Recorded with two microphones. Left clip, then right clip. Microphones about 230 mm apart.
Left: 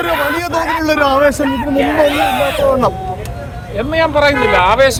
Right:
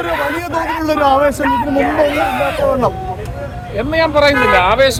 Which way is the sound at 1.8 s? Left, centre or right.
Left.